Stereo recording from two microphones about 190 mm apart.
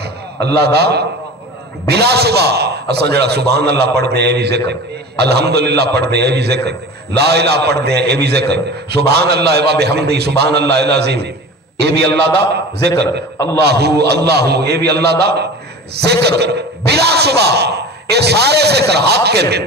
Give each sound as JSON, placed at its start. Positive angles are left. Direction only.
{"t": 0.0, "sound": "a man's voice", "side_deg": -60}